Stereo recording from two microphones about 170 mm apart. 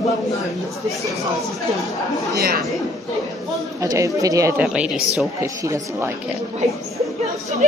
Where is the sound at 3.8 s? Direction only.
20° right (ahead or behind).